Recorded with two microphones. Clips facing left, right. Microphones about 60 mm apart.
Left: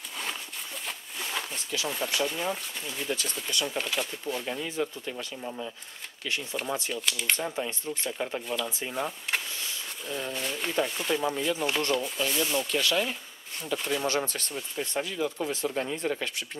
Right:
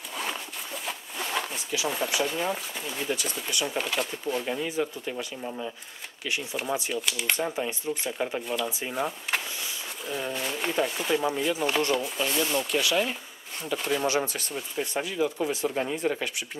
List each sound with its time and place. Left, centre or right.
1.3 s speech: centre
6.2 s speech: centre